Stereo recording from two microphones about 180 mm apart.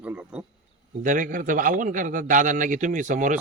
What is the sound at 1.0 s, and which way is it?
A man's voice, 45° right (ahead or behind).